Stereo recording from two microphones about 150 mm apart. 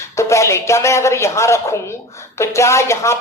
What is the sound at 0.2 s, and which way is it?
A woman's voice, 20° left (ahead or behind).